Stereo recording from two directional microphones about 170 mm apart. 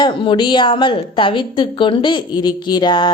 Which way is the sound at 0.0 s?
30° left (ahead or behind).